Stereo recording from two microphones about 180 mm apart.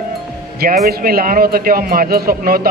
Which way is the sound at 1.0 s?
55° right (ahead or behind).